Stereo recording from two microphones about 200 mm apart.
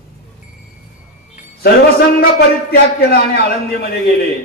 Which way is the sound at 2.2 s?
50° left (ahead or behind).